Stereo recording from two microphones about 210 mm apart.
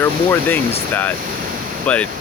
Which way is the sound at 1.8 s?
5° left (ahead or behind).